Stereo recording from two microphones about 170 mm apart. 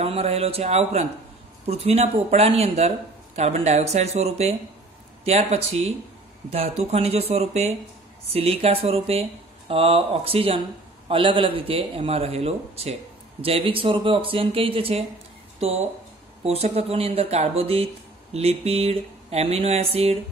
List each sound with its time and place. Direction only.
0.0 s speech: 35° right (ahead or behind)